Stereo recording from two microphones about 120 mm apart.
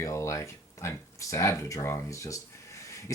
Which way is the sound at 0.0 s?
25° left (ahead or behind).